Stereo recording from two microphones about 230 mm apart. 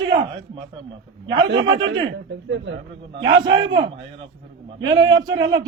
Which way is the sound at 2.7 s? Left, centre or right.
Right.